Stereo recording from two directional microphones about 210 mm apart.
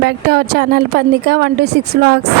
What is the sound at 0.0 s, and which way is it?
A woman's voice, 50° right (ahead or behind).